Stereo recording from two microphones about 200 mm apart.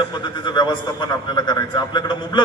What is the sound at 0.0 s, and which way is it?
A man's voice, 25° left (ahead or behind).